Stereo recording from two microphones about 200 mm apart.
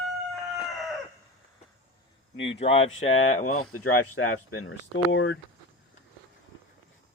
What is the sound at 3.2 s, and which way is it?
Speech, 90° left.